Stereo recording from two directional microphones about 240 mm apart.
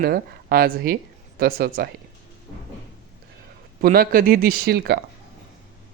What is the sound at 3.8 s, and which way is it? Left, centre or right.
Speech, right.